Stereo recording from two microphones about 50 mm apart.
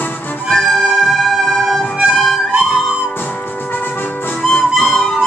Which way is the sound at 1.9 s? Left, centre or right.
Centre.